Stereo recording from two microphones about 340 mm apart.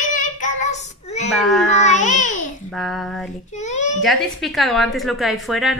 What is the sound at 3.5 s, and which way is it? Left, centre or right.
Speech, left.